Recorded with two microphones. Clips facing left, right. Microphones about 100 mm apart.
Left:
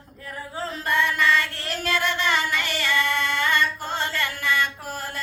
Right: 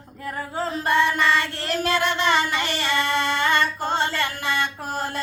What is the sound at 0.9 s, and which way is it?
Child singing, 30° right (ahead or behind).